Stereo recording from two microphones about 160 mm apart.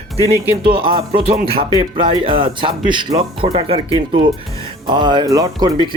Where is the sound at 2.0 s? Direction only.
35° right (ahead or behind).